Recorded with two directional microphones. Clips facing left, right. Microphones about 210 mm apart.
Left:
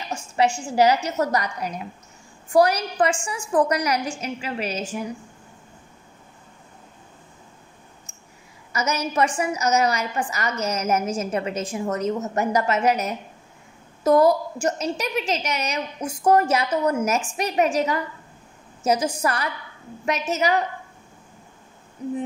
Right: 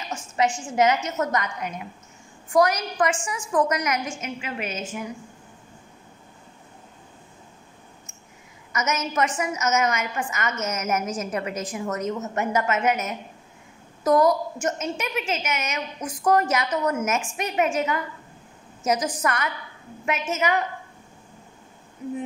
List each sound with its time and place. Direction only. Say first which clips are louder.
0.4 s a woman's voice: left 2 dB; 30° left (ahead or behind)
8.7 s a woman's voice: left 2 dB; 35° left (ahead or behind)